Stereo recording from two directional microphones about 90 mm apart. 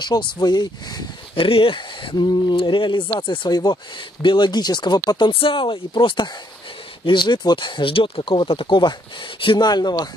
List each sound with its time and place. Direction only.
0.0 s speech: 55° left (ahead or behind)
1.3 s speech: 80° left
2.2 s speech: 60° left (ahead or behind)
3.1 s speech: 55° left (ahead or behind)
5.1 s speech: 70° left (ahead or behind)
9.7 s speech: 50° left (ahead or behind)